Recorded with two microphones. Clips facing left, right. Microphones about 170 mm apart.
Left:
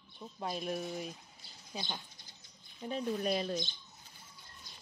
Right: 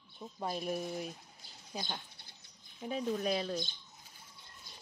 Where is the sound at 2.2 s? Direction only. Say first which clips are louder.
Right 1 dB; 65° right (ahead or behind).